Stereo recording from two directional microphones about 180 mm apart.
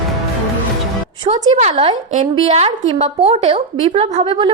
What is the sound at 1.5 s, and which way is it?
A woman's voice, 40° right (ahead or behind).